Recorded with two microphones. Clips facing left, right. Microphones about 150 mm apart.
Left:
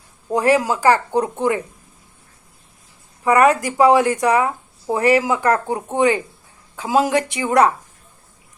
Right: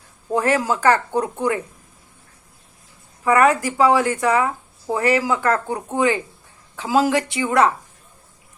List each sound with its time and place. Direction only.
0.3 s speech: 10° left (ahead or behind)
3.2 s speech: 15° left (ahead or behind)